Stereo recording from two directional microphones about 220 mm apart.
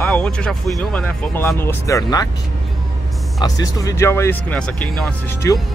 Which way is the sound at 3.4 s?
15° left (ahead or behind).